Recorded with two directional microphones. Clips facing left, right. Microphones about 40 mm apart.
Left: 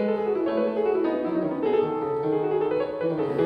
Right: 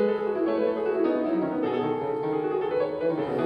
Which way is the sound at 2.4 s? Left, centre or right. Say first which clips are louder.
Left 2 dB; centre.